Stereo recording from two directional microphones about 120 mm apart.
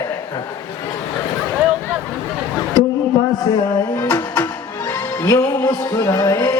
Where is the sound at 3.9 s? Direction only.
25° left (ahead or behind).